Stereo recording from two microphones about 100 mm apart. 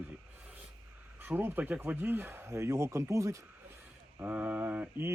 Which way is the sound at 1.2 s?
20° right (ahead or behind).